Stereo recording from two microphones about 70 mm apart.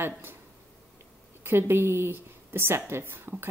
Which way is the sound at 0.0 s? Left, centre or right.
Right.